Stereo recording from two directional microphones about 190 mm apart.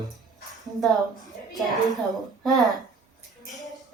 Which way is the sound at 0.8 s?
Centre (ahead or behind).